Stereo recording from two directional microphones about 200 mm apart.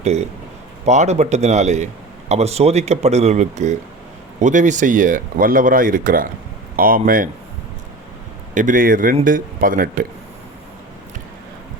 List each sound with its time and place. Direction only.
0.0 s speech: 35° right (ahead or behind)
8.5 s speech: 40° right (ahead or behind)